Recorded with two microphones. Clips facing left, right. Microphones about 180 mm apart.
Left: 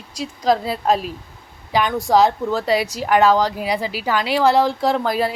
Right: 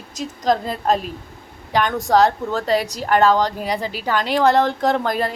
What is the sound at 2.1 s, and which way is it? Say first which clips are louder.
Speech: left 1 dB; 5° left (ahead or behind).